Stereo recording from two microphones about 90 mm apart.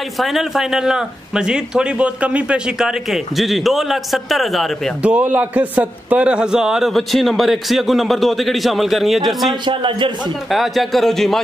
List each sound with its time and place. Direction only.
0.2 s speech: 5° right (ahead or behind)
5.0 s speech: 15° right (ahead or behind)
9.7 s a man's voice: 70° right (ahead or behind)
10.5 s speech: centre (ahead or behind)